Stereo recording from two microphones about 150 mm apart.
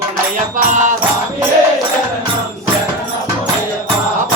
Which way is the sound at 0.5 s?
55° right (ahead or behind).